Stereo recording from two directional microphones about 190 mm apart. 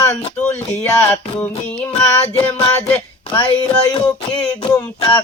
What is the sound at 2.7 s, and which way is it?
Speech, 15° left (ahead or behind).